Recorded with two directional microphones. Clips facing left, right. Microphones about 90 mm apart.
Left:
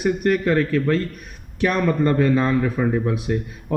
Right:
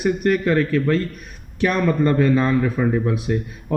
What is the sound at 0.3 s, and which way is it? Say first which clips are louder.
Speech: right 1 dB; 25° left (ahead or behind).